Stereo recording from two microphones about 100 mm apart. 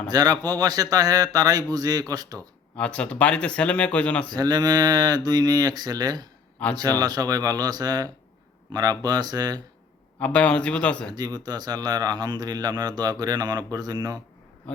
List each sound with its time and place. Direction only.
0.1 s speech: 40° right (ahead or behind)
2.7 s speech: 15° left (ahead or behind)
4.4 s speech: 40° right (ahead or behind)
6.6 s speech: 15° left (ahead or behind)
7.0 s speech: 40° right (ahead or behind)
10.2 s speech: 15° left (ahead or behind)
11.1 s speech: 40° right (ahead or behind)